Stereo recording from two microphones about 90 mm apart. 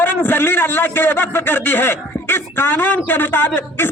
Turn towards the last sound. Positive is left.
turn(degrees=25)  # may be behind; listen again after turning